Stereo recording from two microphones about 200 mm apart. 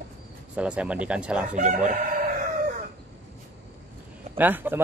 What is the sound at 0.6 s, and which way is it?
Speech, 5° right (ahead or behind).